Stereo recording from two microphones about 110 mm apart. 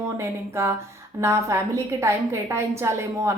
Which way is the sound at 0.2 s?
25° right (ahead or behind).